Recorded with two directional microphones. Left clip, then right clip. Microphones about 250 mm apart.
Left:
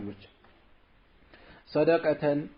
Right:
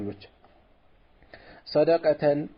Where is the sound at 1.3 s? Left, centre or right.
Right.